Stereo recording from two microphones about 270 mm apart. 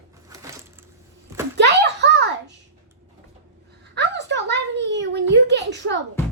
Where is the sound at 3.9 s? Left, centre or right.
Right.